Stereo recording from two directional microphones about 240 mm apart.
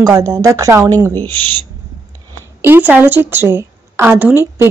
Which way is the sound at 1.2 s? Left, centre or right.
Centre.